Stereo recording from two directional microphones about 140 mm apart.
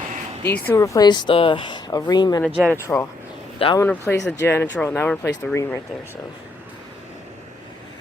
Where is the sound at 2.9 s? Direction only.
15° left (ahead or behind).